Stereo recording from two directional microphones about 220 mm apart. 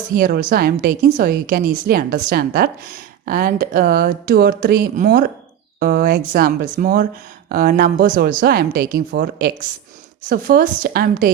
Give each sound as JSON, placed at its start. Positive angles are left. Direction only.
{"t": 0.1, "sound": "a woman's voice", "side_deg": -40}